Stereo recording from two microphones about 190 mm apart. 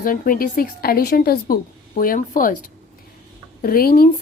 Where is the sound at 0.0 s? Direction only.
45° left (ahead or behind).